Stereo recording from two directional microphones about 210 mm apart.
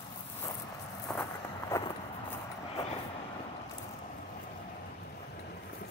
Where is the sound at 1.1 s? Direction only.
5° left (ahead or behind).